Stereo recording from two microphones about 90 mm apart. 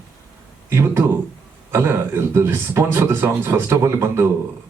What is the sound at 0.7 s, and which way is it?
Speech, 30° right (ahead or behind).